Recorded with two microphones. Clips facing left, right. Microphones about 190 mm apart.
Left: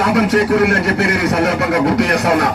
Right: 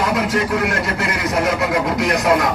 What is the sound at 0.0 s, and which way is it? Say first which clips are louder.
A man's voice: left 5 dB; 65° left (ahead or behind).